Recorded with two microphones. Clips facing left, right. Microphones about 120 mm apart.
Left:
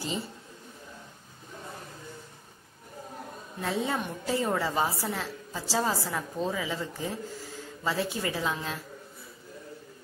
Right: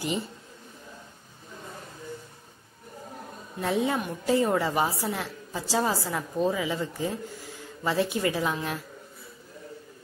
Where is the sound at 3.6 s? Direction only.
15° right (ahead or behind).